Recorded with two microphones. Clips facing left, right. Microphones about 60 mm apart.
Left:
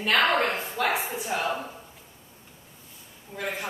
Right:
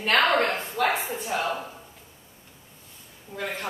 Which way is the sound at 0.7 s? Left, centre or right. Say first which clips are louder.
Right 2 dB; centre.